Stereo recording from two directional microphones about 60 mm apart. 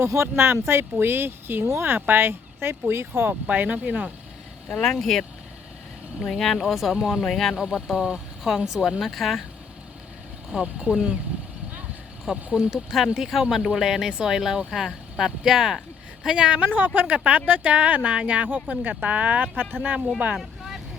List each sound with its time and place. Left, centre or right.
0.1 s speech: right
2.0 s speech: right
3.4 s speech: right
4.8 s speech: centre
7.5 s speech: centre
12.3 s speech: centre
16.6 s speech: right
20.4 s vehicle: centre